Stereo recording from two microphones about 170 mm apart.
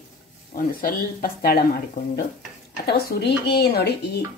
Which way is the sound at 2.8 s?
70° left (ahead or behind).